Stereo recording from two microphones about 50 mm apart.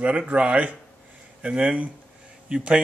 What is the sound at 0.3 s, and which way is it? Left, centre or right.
Speech, right.